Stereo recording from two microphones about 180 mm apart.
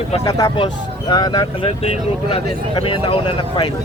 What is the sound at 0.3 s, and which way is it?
Speech, 20° left (ahead or behind).